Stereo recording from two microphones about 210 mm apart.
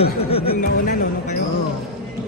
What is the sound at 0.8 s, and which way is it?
Speech, 45° left (ahead or behind).